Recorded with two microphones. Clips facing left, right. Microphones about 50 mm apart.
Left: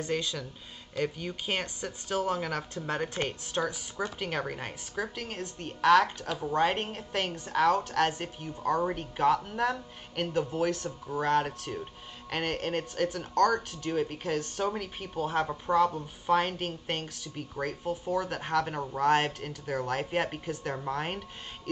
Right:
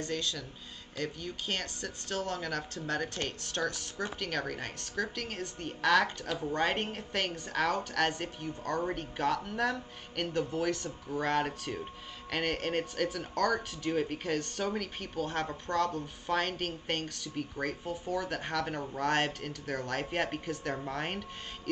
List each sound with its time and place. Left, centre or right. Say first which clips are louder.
0.0 s a woman's voice: left 3 dB; centre